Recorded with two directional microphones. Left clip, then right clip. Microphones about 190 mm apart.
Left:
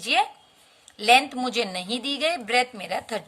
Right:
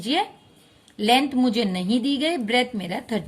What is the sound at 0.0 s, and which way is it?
Speech, 25° left (ahead or behind).